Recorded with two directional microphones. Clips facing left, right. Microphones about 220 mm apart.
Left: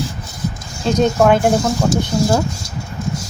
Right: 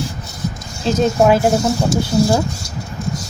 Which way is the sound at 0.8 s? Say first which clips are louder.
Even; 5° right (ahead or behind).